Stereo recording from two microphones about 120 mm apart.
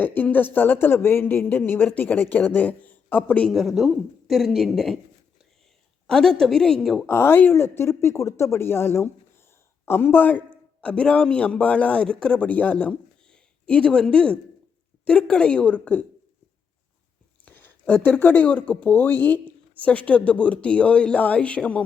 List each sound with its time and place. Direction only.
0.0 s speech: 15° left (ahead or behind)
3.5 s a woman's voice: centre (ahead or behind)
6.1 s a woman's voice: 5° left (ahead or behind)
7.1 s a man's voice: 20° left (ahead or behind)
17.4 s speech: 15° left (ahead or behind)